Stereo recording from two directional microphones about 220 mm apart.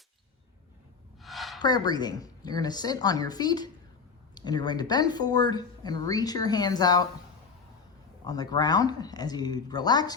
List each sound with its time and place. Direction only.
1.2 s a sound: centre (ahead or behind)
1.6 s speech: 20° left (ahead or behind)
8.3 s speech: 15° left (ahead or behind)